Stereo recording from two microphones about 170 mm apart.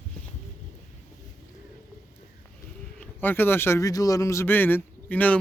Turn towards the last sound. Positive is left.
turn(degrees=10)  # may be behind; listen again after turning